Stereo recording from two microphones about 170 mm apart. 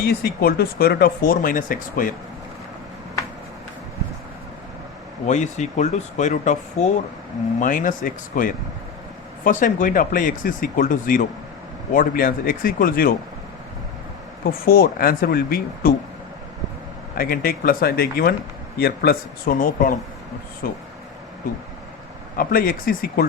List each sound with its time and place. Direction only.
0.0 s speech: 65° left (ahead or behind)
5.2 s speech: 45° left (ahead or behind)
14.6 s speech: 60° left (ahead or behind)
17.2 s speech: 60° left (ahead or behind)
22.4 s speech: 60° left (ahead or behind)